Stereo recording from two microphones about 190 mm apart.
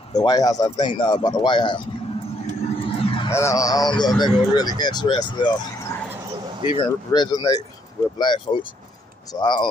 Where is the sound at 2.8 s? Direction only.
30° left (ahead or behind).